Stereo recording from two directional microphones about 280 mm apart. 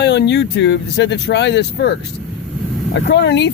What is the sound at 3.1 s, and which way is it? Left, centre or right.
Speech, left.